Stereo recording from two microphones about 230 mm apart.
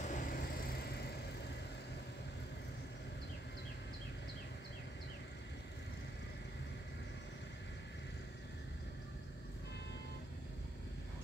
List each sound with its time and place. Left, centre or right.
0.0 s vehicle: left